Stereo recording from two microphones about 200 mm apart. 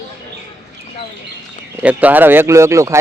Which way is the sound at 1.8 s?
10° right (ahead or behind).